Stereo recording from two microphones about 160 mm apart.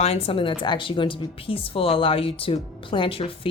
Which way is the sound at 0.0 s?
40° left (ahead or behind).